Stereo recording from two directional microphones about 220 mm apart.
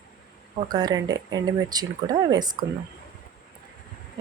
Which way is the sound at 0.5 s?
20° right (ahead or behind).